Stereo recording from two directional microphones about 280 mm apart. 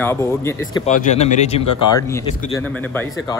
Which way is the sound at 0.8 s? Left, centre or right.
Left.